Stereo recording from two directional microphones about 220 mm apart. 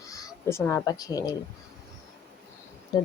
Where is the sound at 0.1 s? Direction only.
10° left (ahead or behind).